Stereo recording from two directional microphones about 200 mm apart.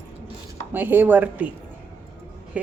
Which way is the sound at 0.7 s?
10° right (ahead or behind).